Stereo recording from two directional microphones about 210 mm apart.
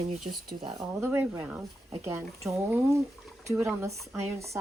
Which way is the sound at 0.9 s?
10° right (ahead or behind).